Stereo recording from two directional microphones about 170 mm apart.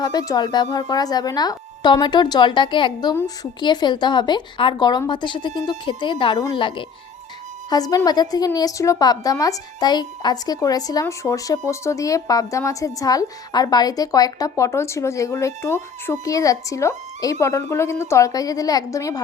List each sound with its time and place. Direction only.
0.0 s a woman's voice: 25° left (ahead or behind)